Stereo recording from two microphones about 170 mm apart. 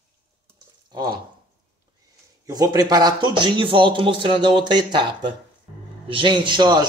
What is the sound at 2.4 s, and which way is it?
Speech, 20° right (ahead or behind).